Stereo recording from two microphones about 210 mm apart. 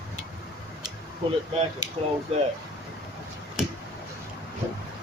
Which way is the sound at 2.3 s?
25° right (ahead or behind).